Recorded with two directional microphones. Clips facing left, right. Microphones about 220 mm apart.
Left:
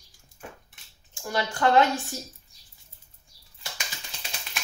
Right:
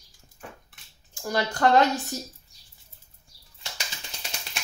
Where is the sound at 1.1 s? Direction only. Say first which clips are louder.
Right 2 dB; 40° right (ahead or behind).